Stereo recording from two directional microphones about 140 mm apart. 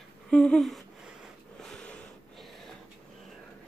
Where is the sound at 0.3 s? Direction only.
5° left (ahead or behind).